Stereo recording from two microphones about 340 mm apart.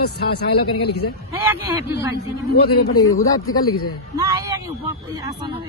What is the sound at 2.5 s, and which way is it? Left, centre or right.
Speech, left.